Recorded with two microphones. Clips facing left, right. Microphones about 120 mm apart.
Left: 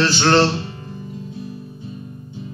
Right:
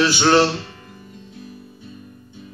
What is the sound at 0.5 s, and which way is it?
Music, 25° left (ahead or behind).